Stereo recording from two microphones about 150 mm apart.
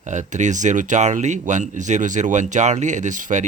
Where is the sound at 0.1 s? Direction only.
55° right (ahead or behind).